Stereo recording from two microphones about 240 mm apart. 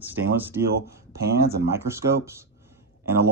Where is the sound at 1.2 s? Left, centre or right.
Right.